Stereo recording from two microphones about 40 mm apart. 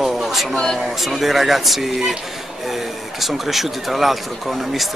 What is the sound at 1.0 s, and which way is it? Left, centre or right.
Speech, centre.